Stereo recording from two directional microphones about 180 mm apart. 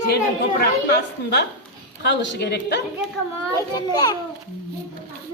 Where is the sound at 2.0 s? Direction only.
80° left.